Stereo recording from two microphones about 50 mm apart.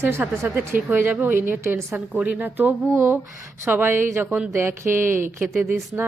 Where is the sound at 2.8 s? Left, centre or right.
Right.